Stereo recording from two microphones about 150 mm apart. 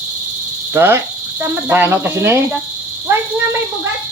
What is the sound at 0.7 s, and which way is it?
Speech, 15° right (ahead or behind).